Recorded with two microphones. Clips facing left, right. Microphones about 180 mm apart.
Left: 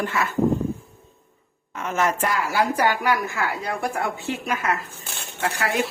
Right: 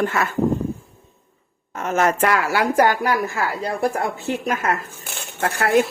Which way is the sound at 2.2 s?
70° right (ahead or behind).